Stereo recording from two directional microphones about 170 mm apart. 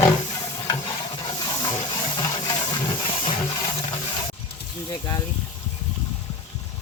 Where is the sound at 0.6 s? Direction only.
25° left (ahead or behind).